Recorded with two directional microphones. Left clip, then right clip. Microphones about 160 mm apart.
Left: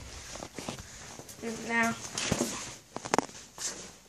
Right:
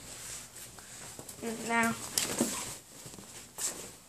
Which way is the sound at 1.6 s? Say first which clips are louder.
Left 1 dB; 10° right (ahead or behind).